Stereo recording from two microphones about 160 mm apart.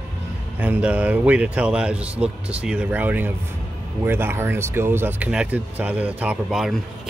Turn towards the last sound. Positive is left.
turn(degrees=-5)  # may be behind; listen again after turning